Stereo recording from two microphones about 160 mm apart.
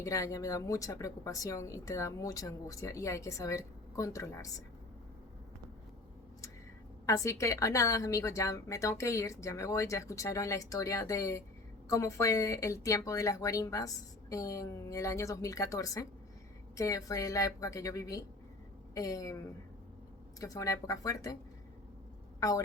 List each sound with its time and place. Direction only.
0.0 s a woman's voice: 20° left (ahead or behind)
7.0 s a woman's voice: 20° left (ahead or behind)
20.4 s a woman's voice: 20° left (ahead or behind)
22.4 s a woman's voice: 20° left (ahead or behind)